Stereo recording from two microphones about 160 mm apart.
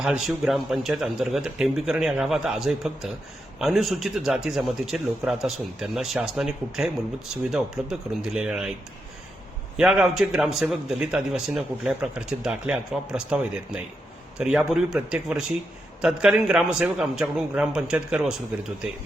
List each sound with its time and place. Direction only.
0.0 s speech: 5° right (ahead or behind)
9.7 s speech: 5° right (ahead or behind)